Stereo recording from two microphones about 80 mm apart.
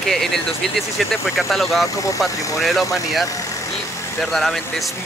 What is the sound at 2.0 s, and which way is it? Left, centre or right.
Speech, left.